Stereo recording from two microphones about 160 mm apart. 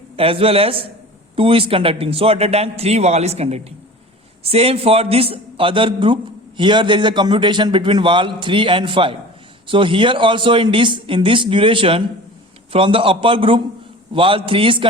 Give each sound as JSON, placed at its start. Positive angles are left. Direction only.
{"t": 0.2, "sound": "a man's voice", "side_deg": -35}